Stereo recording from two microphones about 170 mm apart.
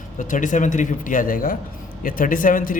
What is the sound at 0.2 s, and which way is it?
A man's voice, 50° left (ahead or behind).